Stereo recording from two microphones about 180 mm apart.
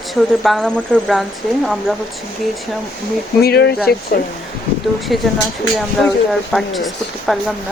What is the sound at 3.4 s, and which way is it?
Speech, 65° left (ahead or behind).